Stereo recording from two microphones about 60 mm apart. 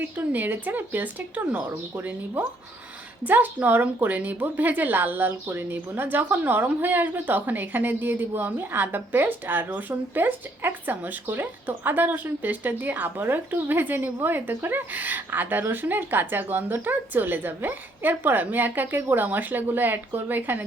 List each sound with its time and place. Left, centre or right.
0.0 s a woman's voice: right